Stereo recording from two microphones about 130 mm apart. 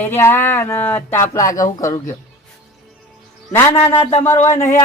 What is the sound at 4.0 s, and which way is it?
Speech, 55° left (ahead or behind).